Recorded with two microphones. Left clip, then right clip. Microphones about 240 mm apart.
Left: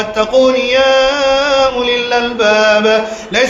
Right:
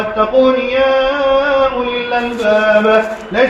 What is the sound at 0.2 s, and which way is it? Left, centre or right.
Chant, left.